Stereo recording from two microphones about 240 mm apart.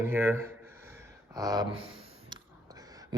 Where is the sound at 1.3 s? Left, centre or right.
Centre.